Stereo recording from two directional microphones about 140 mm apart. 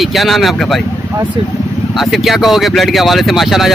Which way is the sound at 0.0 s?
Centre (ahead or behind).